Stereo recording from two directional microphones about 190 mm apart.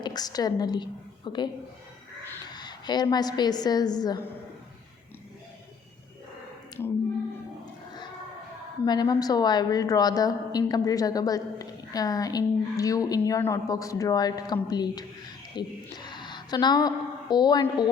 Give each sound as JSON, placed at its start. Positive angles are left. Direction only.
{"t": 0.0, "sound": "a woman's voice", "side_deg": 20}
{"t": 2.5, "sound": "a woman's voice", "side_deg": 20}
{"t": 6.8, "sound": "a sound", "side_deg": 15}
{"t": 8.8, "sound": "a woman's voice", "side_deg": 20}